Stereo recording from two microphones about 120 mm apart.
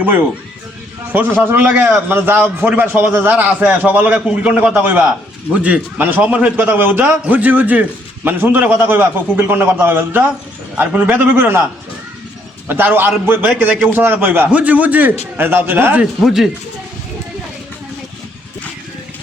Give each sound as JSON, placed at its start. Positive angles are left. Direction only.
{"t": 1.1, "sound": "a man's voice", "side_deg": -15}
{"t": 12.6, "sound": "a man's voice", "side_deg": -15}
{"t": 16.2, "sound": "speech", "side_deg": 0}